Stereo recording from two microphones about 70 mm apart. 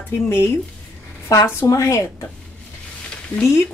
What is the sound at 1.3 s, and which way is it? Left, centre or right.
Speech, left.